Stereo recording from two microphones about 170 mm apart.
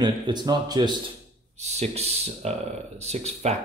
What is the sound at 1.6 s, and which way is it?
Speech, 40° right (ahead or behind).